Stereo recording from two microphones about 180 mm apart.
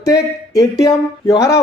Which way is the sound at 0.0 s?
20° left (ahead or behind).